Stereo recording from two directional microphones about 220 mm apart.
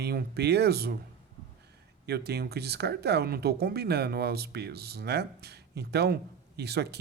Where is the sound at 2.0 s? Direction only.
45° right (ahead or behind).